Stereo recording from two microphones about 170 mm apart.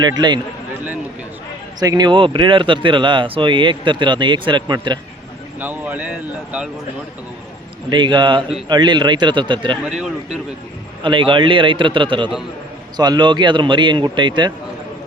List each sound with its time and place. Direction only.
1.8 s speech: 25° right (ahead or behind)
5.5 s speech: 10° right (ahead or behind)
7.9 s speech: 25° right (ahead or behind)
11.0 s speech: 30° right (ahead or behind)